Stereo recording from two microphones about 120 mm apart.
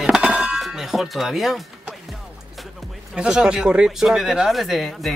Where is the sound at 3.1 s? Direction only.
5° right (ahead or behind).